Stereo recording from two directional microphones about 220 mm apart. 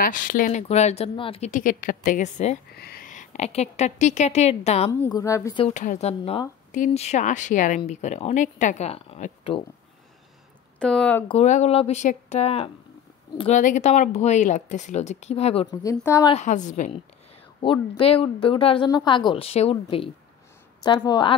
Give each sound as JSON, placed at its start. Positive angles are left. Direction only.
{"t": 0.0, "sound": "speech", "side_deg": 40}
{"t": 2.7, "sound": "speech", "side_deg": 45}
{"t": 5.0, "sound": "a woman's voice", "side_deg": 15}
{"t": 5.6, "sound": "speech", "side_deg": 35}
{"t": 10.8, "sound": "speech", "side_deg": 5}
{"t": 11.2, "sound": "speech", "side_deg": 30}
{"t": 15.8, "sound": "a woman's voice", "side_deg": 15}
{"t": 16.3, "sound": "speech", "side_deg": 35}
{"t": 17.6, "sound": "speech", "side_deg": 25}